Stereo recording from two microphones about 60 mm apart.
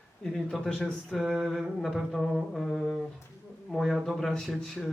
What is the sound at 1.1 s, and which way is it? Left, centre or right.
Music, centre.